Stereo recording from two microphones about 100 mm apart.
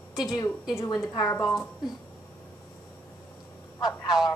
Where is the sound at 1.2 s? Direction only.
35° left (ahead or behind).